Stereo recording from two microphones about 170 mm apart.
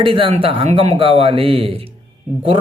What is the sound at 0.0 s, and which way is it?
Speech, 30° right (ahead or behind).